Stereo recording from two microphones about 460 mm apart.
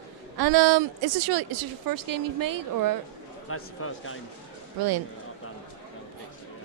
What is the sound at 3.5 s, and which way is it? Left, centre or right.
Speech, left.